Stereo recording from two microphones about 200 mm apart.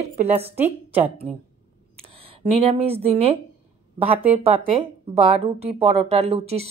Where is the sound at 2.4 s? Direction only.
30° right (ahead or behind).